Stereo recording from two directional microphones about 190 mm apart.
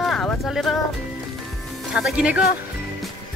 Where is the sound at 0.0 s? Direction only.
5° left (ahead or behind).